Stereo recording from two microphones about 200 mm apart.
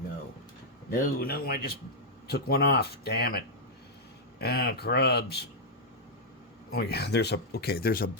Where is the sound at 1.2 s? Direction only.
50° left (ahead or behind).